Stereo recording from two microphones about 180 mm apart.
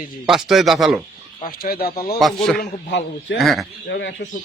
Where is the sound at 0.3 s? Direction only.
Centre (ahead or behind).